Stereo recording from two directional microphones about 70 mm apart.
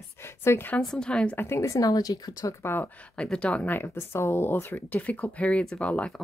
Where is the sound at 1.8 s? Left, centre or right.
Left.